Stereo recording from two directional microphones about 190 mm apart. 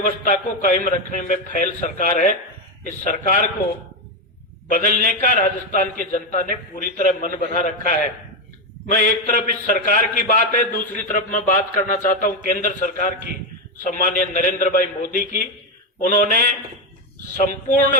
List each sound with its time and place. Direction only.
0.0 s a man's voice: 40° left (ahead or behind)
4.7 s a man's voice: 40° left (ahead or behind)